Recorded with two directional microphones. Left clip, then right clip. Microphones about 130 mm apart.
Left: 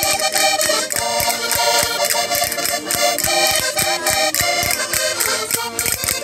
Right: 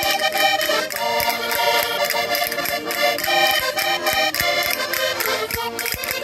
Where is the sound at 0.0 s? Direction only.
55° left (ahead or behind).